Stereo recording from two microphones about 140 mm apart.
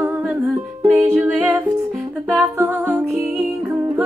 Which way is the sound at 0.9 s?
15° right (ahead or behind).